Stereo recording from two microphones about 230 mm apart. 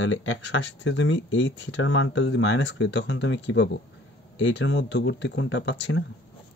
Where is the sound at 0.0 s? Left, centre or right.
Left.